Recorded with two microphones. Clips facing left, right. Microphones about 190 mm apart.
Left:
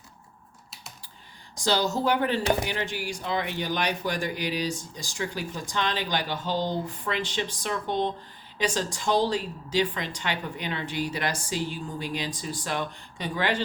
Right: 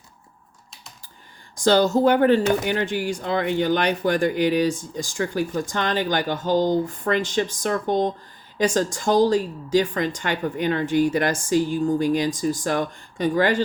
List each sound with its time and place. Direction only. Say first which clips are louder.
1.6 s speech: right 8 dB; 55° right (ahead or behind)